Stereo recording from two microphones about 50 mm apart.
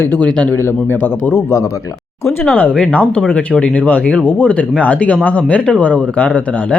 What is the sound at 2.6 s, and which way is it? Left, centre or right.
Speech, left.